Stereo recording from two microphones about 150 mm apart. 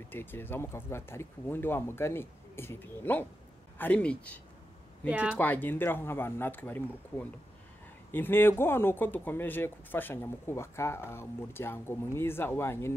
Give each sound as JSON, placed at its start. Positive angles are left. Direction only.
{"t": 0.1, "sound": "speech", "side_deg": 15}
{"t": 5.0, "sound": "speech", "side_deg": -10}
{"t": 5.4, "sound": "speech", "side_deg": 10}